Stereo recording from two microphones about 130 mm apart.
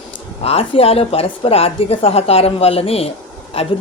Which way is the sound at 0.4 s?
50° left (ahead or behind).